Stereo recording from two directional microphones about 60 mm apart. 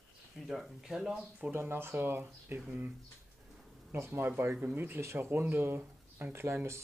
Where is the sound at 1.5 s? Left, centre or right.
Right.